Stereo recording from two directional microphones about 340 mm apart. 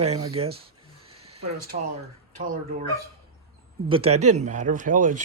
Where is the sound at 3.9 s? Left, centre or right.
Centre.